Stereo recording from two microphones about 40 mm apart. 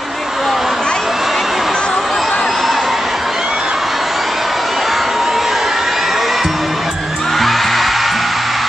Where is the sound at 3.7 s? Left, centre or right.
Centre.